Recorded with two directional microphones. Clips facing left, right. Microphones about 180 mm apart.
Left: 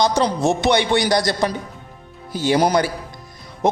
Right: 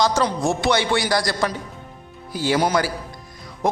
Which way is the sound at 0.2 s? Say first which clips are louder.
Left 3 dB; 20° left (ahead or behind).